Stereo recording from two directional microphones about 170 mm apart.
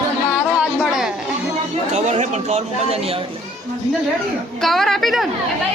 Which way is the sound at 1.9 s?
40° right (ahead or behind).